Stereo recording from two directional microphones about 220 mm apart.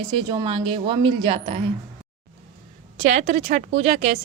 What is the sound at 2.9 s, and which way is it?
Speech, 35° right (ahead or behind).